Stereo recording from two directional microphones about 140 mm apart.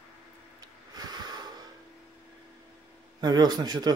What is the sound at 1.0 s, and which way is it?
Snort, 30° right (ahead or behind).